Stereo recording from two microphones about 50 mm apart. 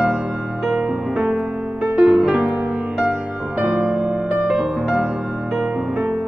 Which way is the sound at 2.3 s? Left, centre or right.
Right.